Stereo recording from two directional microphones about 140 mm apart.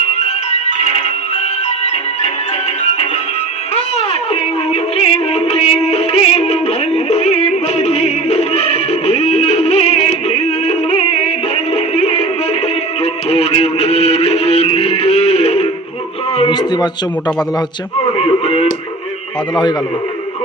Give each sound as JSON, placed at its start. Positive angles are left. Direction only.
{"t": 0.2, "sound": "music", "side_deg": 55}
{"t": 3.8, "sound": "music", "side_deg": 45}
{"t": 16.5, "sound": "a man's voice", "side_deg": 30}
{"t": 18.2, "sound": "radio", "side_deg": 45}